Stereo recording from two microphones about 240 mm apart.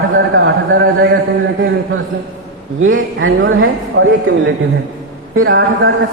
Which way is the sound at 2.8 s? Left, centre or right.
Right.